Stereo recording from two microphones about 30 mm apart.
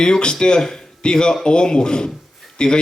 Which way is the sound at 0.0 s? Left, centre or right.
Left.